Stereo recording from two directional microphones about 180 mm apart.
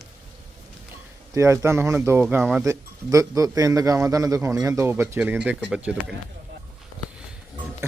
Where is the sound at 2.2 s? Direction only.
5° right (ahead or behind).